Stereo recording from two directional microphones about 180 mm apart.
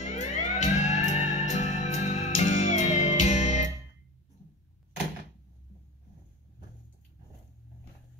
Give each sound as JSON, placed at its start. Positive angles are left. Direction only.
{"t": 0.0, "sound": "music", "side_deg": 40}